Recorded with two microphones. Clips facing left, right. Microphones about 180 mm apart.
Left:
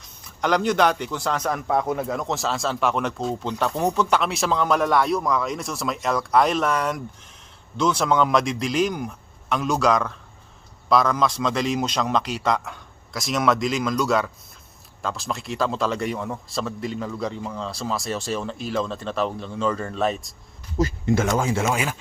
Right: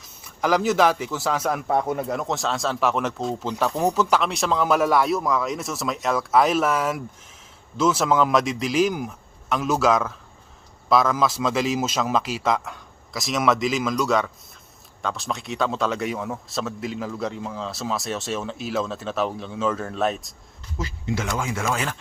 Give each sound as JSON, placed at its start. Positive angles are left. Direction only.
{"t": 0.0, "sound": "a man's voice", "side_deg": -5}
{"t": 20.7, "sound": "speech", "side_deg": 45}
{"t": 21.6, "sound": "speech", "side_deg": 15}